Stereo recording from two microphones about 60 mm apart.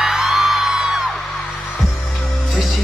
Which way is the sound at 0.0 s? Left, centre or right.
Centre.